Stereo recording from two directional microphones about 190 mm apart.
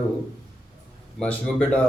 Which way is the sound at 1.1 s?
5° left (ahead or behind).